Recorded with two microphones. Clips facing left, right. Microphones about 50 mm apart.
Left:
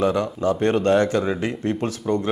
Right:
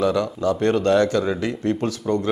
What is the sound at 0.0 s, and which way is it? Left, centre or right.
Speech, left.